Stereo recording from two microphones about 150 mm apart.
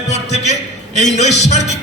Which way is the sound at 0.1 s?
50° left (ahead or behind).